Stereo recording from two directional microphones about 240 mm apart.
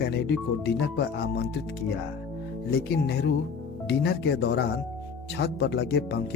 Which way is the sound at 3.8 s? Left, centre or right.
Left.